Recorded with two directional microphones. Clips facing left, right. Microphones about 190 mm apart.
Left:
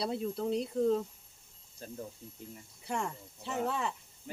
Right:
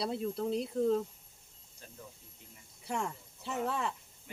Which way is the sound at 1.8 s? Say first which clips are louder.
Left 10 dB; 40° left (ahead or behind).